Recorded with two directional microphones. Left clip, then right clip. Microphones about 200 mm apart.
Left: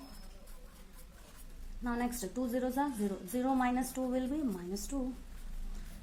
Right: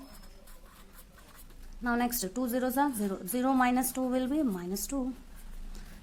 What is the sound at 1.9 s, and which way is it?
A woman's voice, 45° right (ahead or behind).